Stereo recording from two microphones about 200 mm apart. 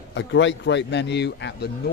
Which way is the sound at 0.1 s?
65° left (ahead or behind).